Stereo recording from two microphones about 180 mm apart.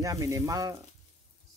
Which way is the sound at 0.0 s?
20° right (ahead or behind).